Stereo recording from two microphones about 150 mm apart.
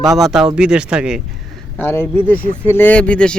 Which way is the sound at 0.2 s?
5° right (ahead or behind).